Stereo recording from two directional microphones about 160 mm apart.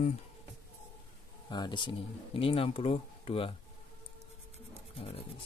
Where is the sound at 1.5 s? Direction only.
30° left (ahead or behind).